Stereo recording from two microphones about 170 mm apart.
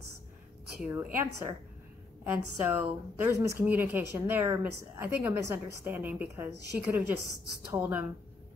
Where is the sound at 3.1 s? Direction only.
15° right (ahead or behind).